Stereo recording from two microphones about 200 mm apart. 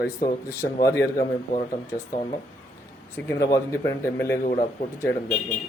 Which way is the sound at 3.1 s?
15° left (ahead or behind).